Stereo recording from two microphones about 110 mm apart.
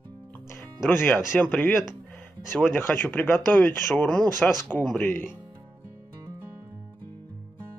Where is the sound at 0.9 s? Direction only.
15° left (ahead or behind).